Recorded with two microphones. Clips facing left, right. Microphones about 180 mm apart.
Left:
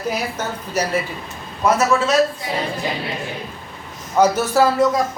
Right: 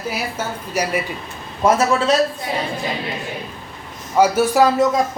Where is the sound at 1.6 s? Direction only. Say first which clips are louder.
Right 2 dB; 30° right (ahead or behind).